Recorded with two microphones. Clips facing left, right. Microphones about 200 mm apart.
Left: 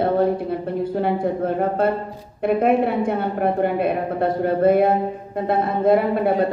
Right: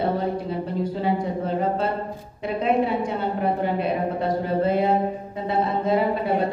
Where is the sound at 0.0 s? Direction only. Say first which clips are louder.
Left 5 dB; 55° left (ahead or behind).